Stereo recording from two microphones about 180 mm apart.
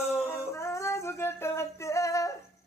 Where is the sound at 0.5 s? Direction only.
15° left (ahead or behind).